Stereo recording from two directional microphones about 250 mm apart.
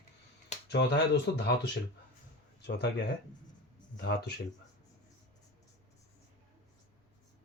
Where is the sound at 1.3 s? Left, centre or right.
Left.